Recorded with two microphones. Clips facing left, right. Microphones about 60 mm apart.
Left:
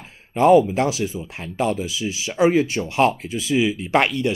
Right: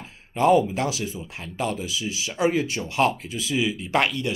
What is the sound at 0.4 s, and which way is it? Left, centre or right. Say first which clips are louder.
Speech: left 5 dB; left.